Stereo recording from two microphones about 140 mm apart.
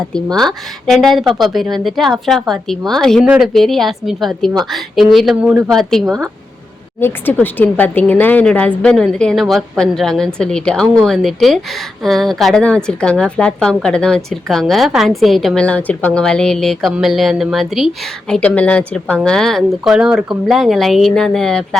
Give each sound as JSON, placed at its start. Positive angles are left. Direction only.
{"t": 0.1, "sound": "speech", "side_deg": 5}
{"t": 5.6, "sound": "speech", "side_deg": 5}
{"t": 7.0, "sound": "speech", "side_deg": 15}